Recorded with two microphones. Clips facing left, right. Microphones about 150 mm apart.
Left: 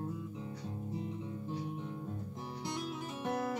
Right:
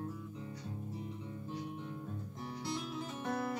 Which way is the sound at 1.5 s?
25° left (ahead or behind).